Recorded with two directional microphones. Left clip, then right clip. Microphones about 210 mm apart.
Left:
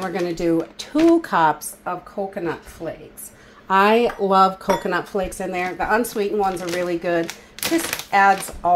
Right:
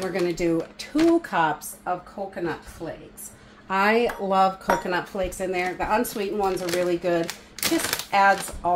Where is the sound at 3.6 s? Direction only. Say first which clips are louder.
Left 5 dB; 35° left (ahead or behind).